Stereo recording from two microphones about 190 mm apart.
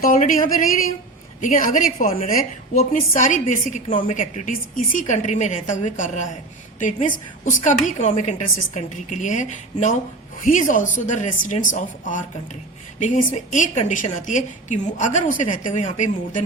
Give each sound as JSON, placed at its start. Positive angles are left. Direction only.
{"t": 0.0, "sound": "a woman's voice", "side_deg": 45}